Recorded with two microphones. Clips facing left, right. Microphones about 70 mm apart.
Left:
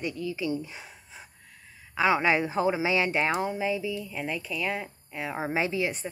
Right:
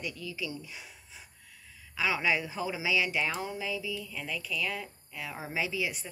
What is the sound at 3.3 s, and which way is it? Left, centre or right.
Speech, left.